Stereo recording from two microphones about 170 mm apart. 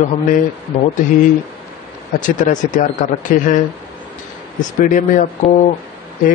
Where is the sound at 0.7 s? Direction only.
45° left (ahead or behind).